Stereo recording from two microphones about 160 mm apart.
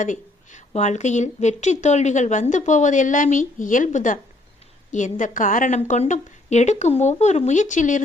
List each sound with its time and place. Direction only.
0.0 s a woman's voice: 50° left (ahead or behind)